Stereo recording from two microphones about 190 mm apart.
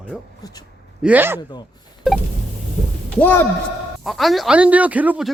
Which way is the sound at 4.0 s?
Centre (ahead or behind).